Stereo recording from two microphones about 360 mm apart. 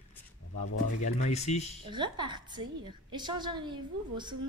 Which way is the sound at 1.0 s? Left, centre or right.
Centre.